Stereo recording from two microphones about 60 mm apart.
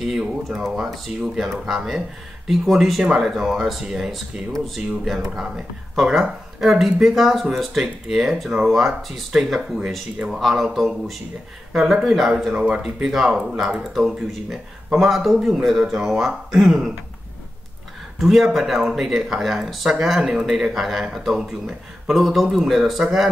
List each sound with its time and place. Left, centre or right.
0.0 s speech: centre
10.3 s speech: centre
12.5 s speech: centre
12.8 s speech: centre
18.2 s speech: centre